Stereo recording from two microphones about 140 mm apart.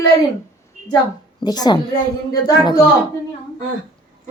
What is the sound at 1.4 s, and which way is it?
Speech, 30° left (ahead or behind).